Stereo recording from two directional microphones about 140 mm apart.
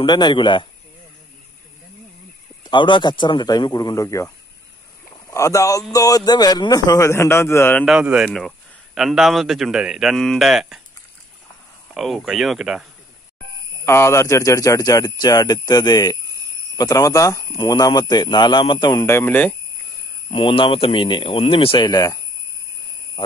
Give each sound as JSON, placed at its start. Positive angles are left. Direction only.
{"t": 0.0, "sound": "speech", "side_deg": 30}
{"t": 2.6, "sound": "speech", "side_deg": 35}
{"t": 5.3, "sound": "a man's voice", "side_deg": 20}
{"t": 7.8, "sound": "speech", "side_deg": -5}
{"t": 11.9, "sound": "speech", "side_deg": 0}
{"t": 13.8, "sound": "a man's voice", "side_deg": 20}
{"t": 19.1, "sound": "speech", "side_deg": 10}
{"t": 20.2, "sound": "speech", "side_deg": 40}
{"t": 23.2, "sound": "speech", "side_deg": 40}